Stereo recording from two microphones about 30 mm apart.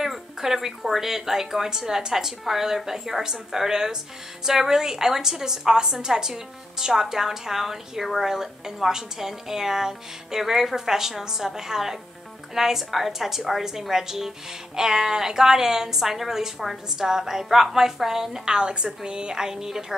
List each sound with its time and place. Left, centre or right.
0.0 s a sound: centre
0.8 s a woman's voice: centre
18.5 s a woman's voice: right
19.3 s a woman's voice: centre